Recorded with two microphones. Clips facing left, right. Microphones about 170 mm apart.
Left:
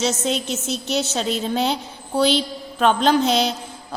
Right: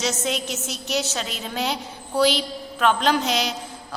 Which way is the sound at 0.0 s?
30° left (ahead or behind).